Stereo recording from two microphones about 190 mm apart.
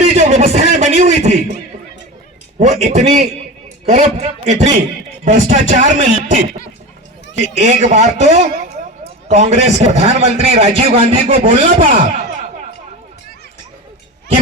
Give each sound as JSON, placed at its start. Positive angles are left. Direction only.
{"t": 0.0, "sound": "a sound", "side_deg": -35}
{"t": 2.6, "sound": "a man's voice", "side_deg": -35}
{"t": 11.9, "sound": "speech", "side_deg": -45}